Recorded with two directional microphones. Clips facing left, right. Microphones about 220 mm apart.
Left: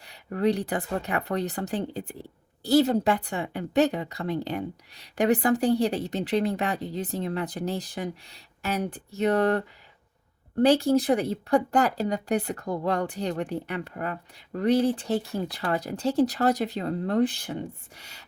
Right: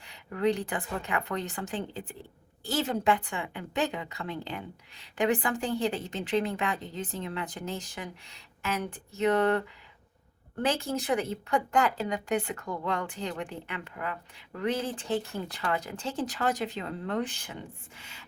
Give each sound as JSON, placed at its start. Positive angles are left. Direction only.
{"t": 0.0, "sound": "speech", "side_deg": 40}